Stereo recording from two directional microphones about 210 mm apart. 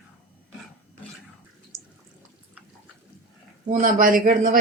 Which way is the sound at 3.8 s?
40° right (ahead or behind).